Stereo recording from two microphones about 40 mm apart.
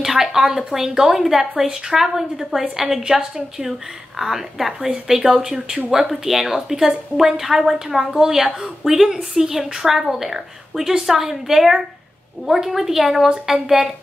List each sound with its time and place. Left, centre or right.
0.0 s a woman's voice: centre